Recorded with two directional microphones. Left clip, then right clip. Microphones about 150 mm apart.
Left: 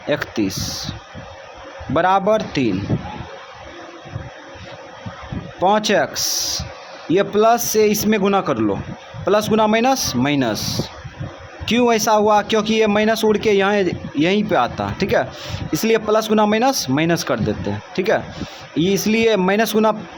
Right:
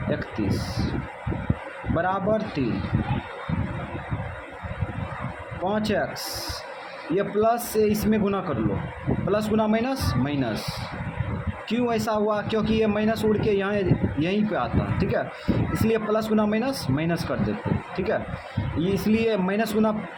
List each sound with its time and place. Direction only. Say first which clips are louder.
0.1 s a man's voice: left 8 dB; 50° left (ahead or behind)
2.0 s a man's voice: left 9 dB; 45° left (ahead or behind)
5.6 s a man's voice: left 10 dB; 50° left (ahead or behind)
11.6 s a man's voice: left 10 dB; 50° left (ahead or behind)